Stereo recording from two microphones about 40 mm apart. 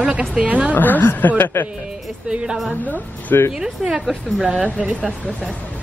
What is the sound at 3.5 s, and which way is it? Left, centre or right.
Speech, centre.